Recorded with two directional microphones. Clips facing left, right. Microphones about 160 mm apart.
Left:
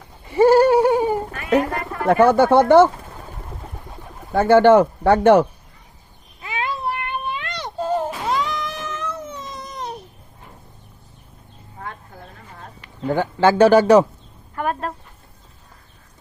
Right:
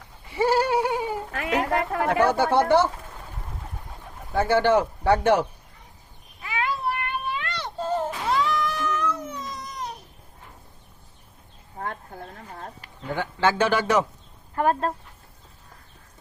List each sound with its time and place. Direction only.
0.3 s goat: 45° left (ahead or behind)
1.7 s speech: 90° right
2.0 s speech: 55° left (ahead or behind)
4.4 s speech: 55° left (ahead or behind)
6.4 s a sound: 20° left (ahead or behind)
13.1 s a man's voice: 35° left (ahead or behind)
14.5 s a woman's voice: 30° right (ahead or behind)